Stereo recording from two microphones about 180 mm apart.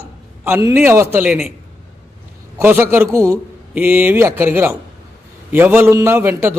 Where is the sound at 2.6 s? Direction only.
10° right (ahead or behind).